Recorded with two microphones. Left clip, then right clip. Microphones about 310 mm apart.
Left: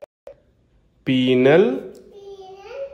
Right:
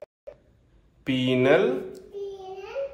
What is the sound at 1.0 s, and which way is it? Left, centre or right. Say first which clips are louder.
Speech: left 6 dB; left.